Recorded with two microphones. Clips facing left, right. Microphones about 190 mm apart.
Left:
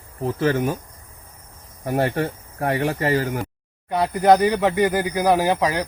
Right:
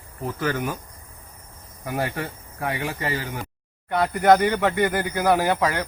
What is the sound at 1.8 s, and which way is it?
Speech, 40° left (ahead or behind).